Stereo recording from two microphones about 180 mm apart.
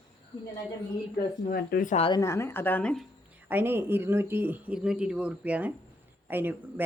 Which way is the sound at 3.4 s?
10° right (ahead or behind).